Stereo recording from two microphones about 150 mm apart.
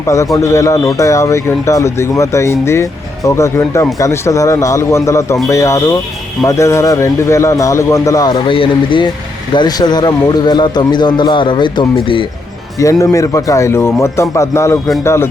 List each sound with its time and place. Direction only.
0.0 s a man's voice: 20° left (ahead or behind)
12.8 s a man's voice: 20° left (ahead or behind)